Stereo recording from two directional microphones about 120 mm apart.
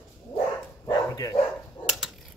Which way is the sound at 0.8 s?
30° left (ahead or behind).